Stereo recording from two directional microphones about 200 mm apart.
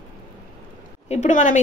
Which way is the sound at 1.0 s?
35° left (ahead or behind).